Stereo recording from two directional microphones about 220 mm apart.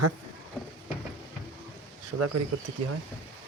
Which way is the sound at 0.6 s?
5° left (ahead or behind).